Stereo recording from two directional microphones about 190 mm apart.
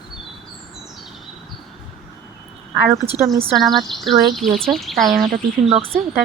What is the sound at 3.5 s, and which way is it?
Speech, centre (ahead or behind).